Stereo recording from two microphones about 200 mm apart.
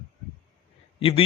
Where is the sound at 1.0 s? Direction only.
25° left (ahead or behind).